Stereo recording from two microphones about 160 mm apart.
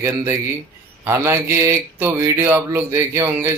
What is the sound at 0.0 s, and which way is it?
Speech, 15° right (ahead or behind).